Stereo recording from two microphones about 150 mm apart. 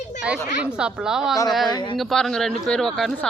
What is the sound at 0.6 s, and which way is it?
Speech, 5° right (ahead or behind).